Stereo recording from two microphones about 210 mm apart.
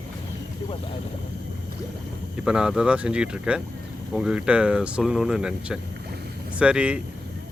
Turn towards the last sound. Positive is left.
turn(degrees=-5)  # may be behind; listen again after turning